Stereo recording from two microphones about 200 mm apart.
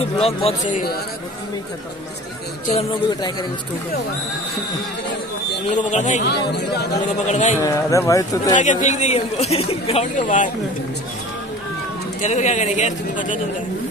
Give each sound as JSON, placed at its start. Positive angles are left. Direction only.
{"t": 0.0, "sound": "a woman's voice", "side_deg": 30}
{"t": 5.7, "sound": "a woman's voice", "side_deg": 35}
{"t": 6.5, "sound": "speech", "side_deg": 55}
{"t": 7.1, "sound": "a woman's voice", "side_deg": 35}
{"t": 7.6, "sound": "speech", "side_deg": 15}
{"t": 8.5, "sound": "a woman's voice", "side_deg": 35}
{"t": 12.2, "sound": "a woman's voice", "side_deg": 35}